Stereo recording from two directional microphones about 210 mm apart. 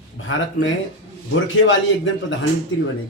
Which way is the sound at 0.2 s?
65° left (ahead or behind).